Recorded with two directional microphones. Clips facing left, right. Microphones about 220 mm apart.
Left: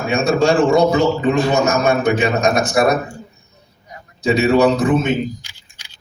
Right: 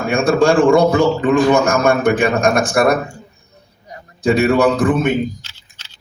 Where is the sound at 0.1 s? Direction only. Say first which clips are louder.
Right 2 dB; 55° right (ahead or behind).